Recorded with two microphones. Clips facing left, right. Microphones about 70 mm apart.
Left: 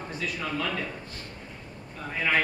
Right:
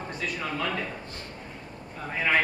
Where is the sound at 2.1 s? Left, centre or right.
Centre.